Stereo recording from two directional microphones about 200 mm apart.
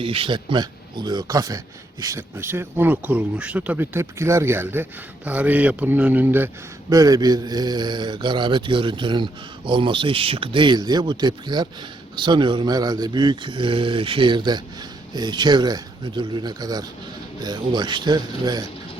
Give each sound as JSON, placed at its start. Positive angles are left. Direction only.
{"t": 0.0, "sound": "speech", "side_deg": -25}